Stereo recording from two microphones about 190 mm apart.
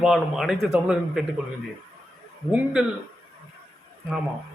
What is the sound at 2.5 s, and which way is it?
Speech, 5° right (ahead or behind).